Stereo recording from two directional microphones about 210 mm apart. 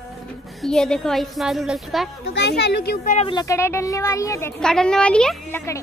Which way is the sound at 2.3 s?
55° left (ahead or behind).